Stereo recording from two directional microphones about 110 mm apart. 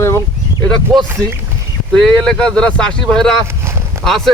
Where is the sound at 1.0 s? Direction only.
20° right (ahead or behind).